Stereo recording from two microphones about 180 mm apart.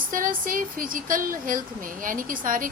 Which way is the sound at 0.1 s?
50° right (ahead or behind).